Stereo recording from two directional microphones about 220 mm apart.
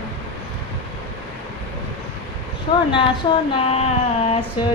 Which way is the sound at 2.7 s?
25° left (ahead or behind).